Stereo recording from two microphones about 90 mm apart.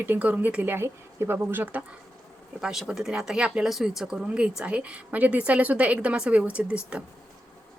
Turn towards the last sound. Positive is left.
turn(degrees=-15)  # may be behind; listen again after turning